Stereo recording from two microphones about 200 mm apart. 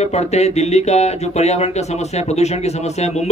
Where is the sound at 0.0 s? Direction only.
35° left (ahead or behind).